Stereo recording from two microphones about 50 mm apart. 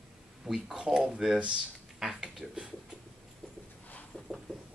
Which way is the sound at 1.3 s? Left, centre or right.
Right.